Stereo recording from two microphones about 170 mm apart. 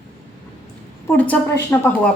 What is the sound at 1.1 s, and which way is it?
Speech, 10° left (ahead or behind).